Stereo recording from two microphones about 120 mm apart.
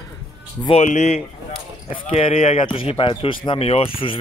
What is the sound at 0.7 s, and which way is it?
Speech, 70° left (ahead or behind).